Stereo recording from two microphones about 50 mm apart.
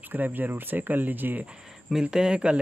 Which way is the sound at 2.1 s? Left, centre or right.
Centre.